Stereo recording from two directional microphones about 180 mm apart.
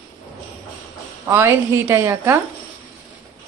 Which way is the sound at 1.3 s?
15° right (ahead or behind).